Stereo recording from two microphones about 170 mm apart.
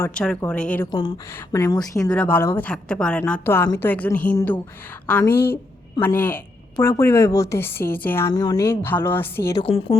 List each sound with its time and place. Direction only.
0.0 s a woman's voice: 5° left (ahead or behind)
0.9 s speech: 25° left (ahead or behind)
2.0 s a woman's voice: 10° left (ahead or behind)
8.3 s a woman's voice: 25° left (ahead or behind)
9.6 s speech: 35° left (ahead or behind)